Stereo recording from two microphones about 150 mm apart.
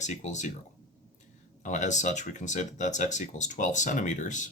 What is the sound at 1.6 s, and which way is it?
Speech, 55° left (ahead or behind).